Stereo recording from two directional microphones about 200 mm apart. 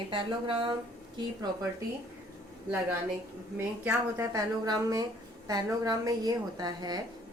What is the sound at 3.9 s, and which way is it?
A woman's voice, 15° right (ahead or behind).